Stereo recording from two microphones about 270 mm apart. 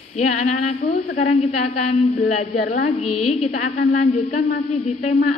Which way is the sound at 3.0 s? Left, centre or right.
Left.